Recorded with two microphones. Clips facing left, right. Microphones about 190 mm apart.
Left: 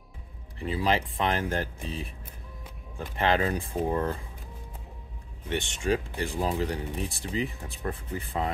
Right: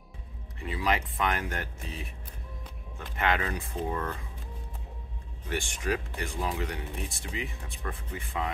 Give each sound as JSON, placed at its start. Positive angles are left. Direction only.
{"t": 0.6, "sound": "speech", "side_deg": 30}
{"t": 3.2, "sound": "speech", "side_deg": 30}
{"t": 5.5, "sound": "speech", "side_deg": 25}